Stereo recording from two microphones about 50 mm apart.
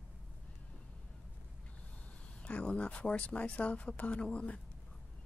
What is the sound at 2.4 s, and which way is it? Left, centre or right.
Speech, left.